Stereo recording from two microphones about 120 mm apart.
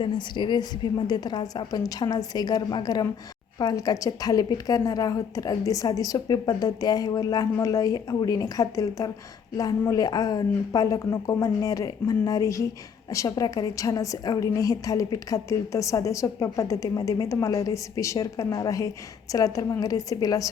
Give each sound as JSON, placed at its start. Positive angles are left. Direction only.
{"t": 0.0, "sound": "a woman's voice", "side_deg": 40}